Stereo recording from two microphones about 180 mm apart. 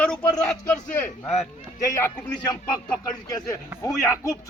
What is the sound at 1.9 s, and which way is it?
Speech, 20° left (ahead or behind).